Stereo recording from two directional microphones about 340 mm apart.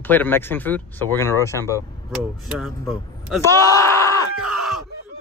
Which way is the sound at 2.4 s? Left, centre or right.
Centre.